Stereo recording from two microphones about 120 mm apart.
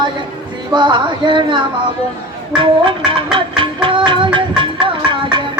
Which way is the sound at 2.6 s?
45° right (ahead or behind).